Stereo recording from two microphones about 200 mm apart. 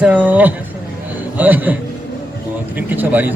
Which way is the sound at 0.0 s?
5° right (ahead or behind).